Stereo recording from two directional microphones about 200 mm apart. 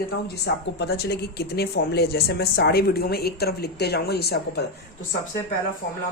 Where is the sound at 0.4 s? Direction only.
55° left (ahead or behind).